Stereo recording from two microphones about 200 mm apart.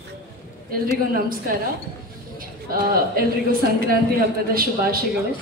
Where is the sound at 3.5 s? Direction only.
50° right (ahead or behind).